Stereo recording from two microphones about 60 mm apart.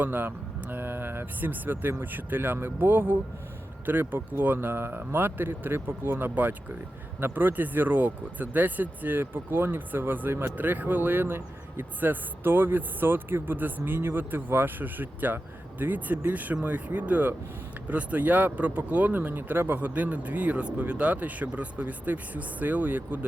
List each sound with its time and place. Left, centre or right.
0.0 s speech: right